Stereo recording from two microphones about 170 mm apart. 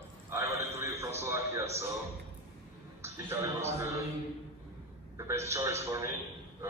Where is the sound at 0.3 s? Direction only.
15° right (ahead or behind).